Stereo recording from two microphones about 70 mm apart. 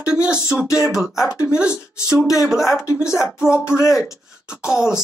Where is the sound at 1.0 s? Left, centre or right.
Left.